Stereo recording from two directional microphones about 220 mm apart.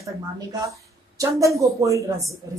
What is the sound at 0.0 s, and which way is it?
A woman's voice, 15° right (ahead or behind).